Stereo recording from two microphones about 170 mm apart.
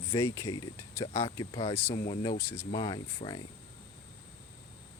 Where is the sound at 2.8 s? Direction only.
25° left (ahead or behind).